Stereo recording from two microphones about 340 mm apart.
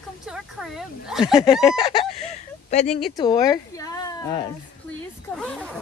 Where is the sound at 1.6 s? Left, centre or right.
Centre.